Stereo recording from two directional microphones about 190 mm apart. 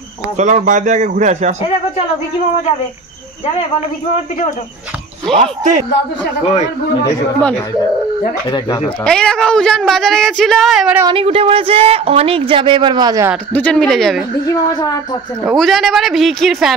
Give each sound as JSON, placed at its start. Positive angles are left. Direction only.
{"t": 0.4, "sound": "speech", "side_deg": -40}
{"t": 5.4, "sound": "speech", "side_deg": -40}
{"t": 9.0, "sound": "speech", "side_deg": 5}
{"t": 11.0, "sound": "speech", "side_deg": -25}
{"t": 13.5, "sound": "speech", "side_deg": 10}
{"t": 14.4, "sound": "a woman's voice", "side_deg": 20}
{"t": 15.4, "sound": "speech", "side_deg": 0}